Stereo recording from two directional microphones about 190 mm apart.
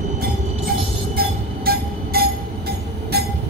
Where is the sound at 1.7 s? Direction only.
50° right (ahead or behind).